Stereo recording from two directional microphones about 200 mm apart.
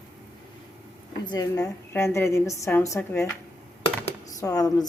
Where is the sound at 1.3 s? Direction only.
15° left (ahead or behind).